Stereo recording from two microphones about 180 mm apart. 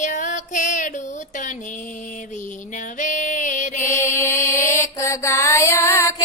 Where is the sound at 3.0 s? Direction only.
45° left (ahead or behind).